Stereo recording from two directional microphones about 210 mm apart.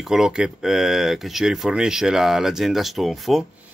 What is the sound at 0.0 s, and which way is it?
Speech, centre (ahead or behind).